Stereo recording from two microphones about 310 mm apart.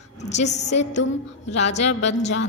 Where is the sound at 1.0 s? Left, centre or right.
Left.